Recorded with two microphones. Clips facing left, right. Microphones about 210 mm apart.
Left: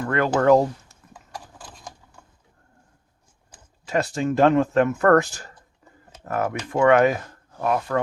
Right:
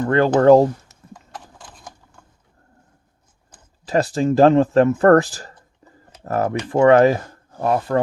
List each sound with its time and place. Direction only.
0.0 s speech: 30° right (ahead or behind)
3.8 s speech: 35° right (ahead or behind)
5.8 s tick-tock: 35° right (ahead or behind)
6.2 s speech: 35° right (ahead or behind)